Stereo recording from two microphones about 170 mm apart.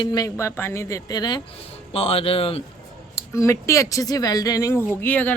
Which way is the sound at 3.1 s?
15° left (ahead or behind).